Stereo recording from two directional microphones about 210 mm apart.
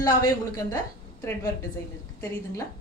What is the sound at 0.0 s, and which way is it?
Speech, 20° left (ahead or behind).